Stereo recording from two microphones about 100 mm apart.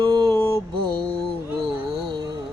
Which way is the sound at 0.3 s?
30° left (ahead or behind).